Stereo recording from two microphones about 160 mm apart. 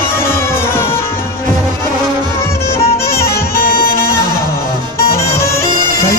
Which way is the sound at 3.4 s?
75° left (ahead or behind).